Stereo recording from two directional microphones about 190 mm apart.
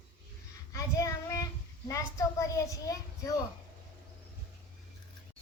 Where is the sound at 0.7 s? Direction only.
15° left (ahead or behind).